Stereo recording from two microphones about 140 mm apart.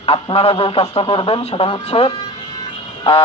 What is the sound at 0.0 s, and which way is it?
A man's voice, 40° left (ahead or behind).